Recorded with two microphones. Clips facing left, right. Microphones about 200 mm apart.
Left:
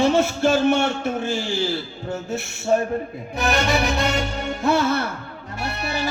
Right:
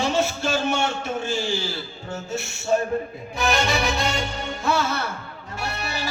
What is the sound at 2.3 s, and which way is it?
Music, 55° left (ahead or behind).